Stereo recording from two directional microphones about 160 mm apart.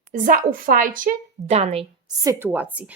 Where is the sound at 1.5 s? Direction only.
40° right (ahead or behind).